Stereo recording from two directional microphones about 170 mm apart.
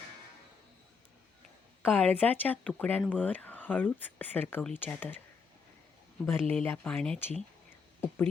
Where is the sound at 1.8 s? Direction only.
10° left (ahead or behind).